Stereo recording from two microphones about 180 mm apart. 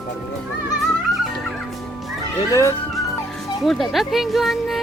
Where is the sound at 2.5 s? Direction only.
15° left (ahead or behind).